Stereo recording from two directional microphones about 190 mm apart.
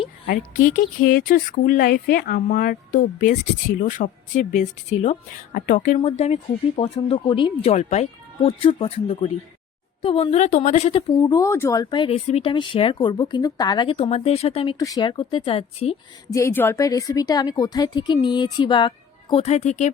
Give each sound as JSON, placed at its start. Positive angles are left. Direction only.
{"t": 0.3, "sound": "speech", "side_deg": 45}
{"t": 6.0, "sound": "speech", "side_deg": 35}
{"t": 14.8, "sound": "speech", "side_deg": 20}
{"t": 16.3, "sound": "speech", "side_deg": 15}